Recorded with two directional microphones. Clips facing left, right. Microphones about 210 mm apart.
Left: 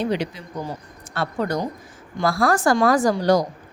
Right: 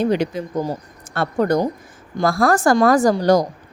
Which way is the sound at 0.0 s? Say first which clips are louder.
Right 5 dB; 45° right (ahead or behind).